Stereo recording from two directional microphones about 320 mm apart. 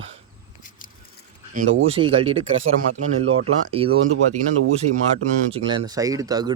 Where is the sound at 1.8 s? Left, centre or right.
Centre.